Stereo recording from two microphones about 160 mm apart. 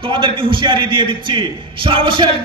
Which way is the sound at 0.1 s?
30° right (ahead or behind).